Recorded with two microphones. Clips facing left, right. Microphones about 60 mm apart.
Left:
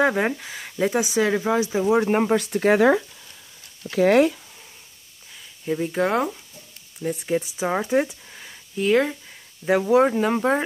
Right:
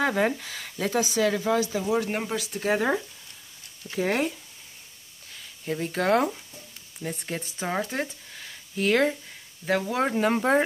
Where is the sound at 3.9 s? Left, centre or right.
Left.